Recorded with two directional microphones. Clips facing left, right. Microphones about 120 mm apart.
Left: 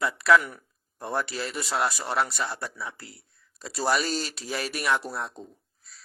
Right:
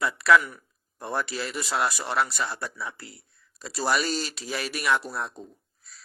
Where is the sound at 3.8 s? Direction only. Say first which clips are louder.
Even; 35° left (ahead or behind).